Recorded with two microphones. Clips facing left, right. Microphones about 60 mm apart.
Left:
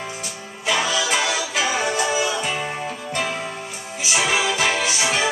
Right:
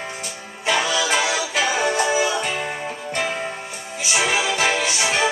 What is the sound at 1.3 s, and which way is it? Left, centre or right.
Music, centre.